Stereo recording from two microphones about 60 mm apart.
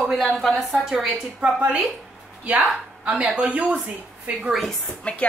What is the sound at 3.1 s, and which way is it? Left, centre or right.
Speech, right.